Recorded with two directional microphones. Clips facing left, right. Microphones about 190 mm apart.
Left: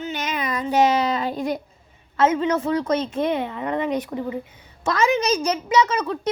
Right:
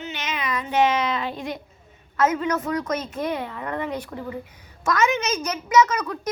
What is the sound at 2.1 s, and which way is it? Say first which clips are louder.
A woman's voice: left 3 dB; 25° left (ahead or behind).